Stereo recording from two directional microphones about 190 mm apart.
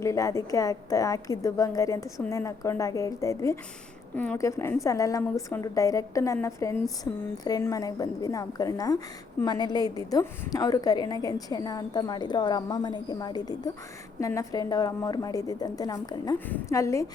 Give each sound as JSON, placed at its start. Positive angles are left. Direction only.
{"t": 0.0, "sound": "a woman's voice", "side_deg": 15}